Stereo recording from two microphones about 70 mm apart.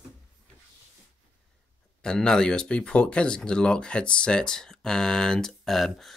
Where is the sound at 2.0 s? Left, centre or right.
Centre.